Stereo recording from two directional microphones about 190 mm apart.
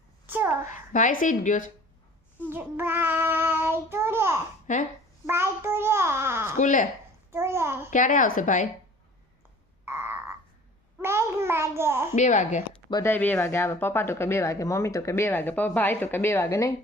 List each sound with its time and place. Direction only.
0.3 s a sound: 10° right (ahead or behind)
0.6 s a woman's voice: 40° left (ahead or behind)
2.5 s child singing: 10° right (ahead or behind)
4.6 s speech: 40° left (ahead or behind)
5.2 s a child's voice: 15° right (ahead or behind)
6.6 s a woman's voice: 40° left (ahead or behind)
7.3 s a child's voice: 15° right (ahead or behind)
7.9 s a woman's voice: 40° left (ahead or behind)
9.8 s frog: 10° right (ahead or behind)
11.0 s a sound: 15° right (ahead or behind)
12.1 s a woman's voice: 40° left (ahead or behind)
12.9 s speech: 15° left (ahead or behind)